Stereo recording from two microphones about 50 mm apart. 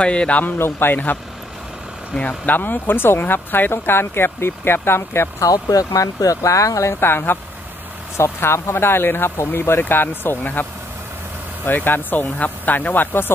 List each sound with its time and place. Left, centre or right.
0.0 s a man's voice: left
0.6 s speech: left
2.1 s speech: left
5.9 s speech: left
7.0 s speech: left
8.4 s speech: left